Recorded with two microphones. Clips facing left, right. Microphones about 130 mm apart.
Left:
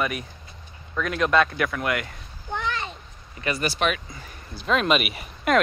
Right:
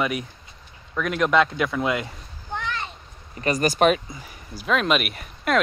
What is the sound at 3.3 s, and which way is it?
Speech, 40° right (ahead or behind).